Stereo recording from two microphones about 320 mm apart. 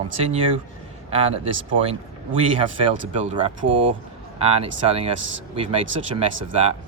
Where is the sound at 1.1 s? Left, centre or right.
Centre.